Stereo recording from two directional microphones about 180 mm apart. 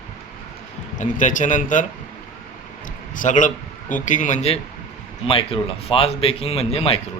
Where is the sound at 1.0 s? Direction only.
45° left (ahead or behind).